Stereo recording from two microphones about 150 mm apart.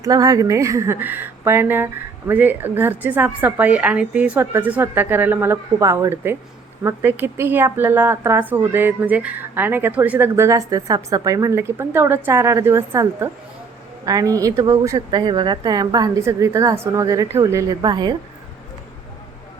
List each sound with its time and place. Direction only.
0.0 s speech: 20° right (ahead or behind)